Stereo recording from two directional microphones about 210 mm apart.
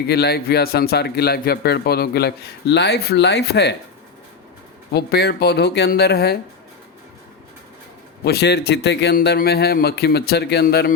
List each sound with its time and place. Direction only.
0.1 s a man's voice: 50° left (ahead or behind)
4.9 s a man's voice: 50° left (ahead or behind)
8.2 s a man's voice: 50° left (ahead or behind)